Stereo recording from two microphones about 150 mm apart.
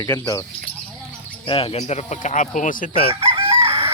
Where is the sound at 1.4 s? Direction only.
40° left (ahead or behind); by 2.9 s 65° left (ahead or behind).